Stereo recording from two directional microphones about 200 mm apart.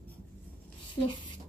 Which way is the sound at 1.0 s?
25° left (ahead or behind).